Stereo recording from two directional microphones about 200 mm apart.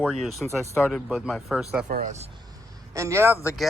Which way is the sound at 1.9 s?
40° right (ahead or behind).